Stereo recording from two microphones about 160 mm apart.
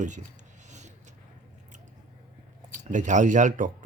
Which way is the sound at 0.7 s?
45° right (ahead or behind).